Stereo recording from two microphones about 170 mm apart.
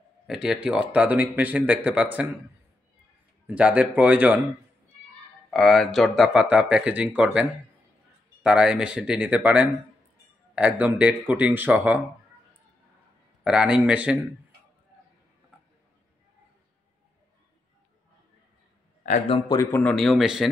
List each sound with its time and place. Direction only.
0.3 s speech: 5° right (ahead or behind)
3.4 s speech: 10° right (ahead or behind)
5.5 s speech: centre (ahead or behind)
13.4 s speech: 5° right (ahead or behind)
19.0 s speech: 40° left (ahead or behind)
19.5 s speech: 15° left (ahead or behind); by 20.4 s centre (ahead or behind)